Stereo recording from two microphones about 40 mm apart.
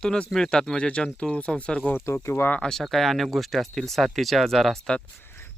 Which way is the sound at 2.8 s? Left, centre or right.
Centre.